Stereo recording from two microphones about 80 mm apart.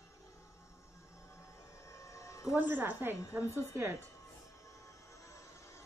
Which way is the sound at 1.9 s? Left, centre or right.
Left.